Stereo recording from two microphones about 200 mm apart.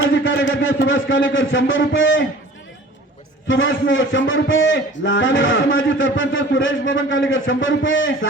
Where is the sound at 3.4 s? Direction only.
75° left (ahead or behind).